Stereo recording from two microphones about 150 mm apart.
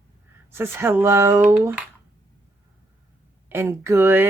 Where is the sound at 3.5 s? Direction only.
15° right (ahead or behind).